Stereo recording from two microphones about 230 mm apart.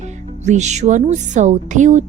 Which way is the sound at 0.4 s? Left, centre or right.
Right.